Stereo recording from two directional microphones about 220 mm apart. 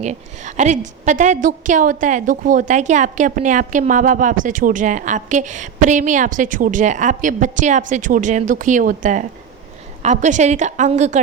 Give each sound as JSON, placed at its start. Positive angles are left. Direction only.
{"t": 0.0, "sound": "a woman's voice", "side_deg": -30}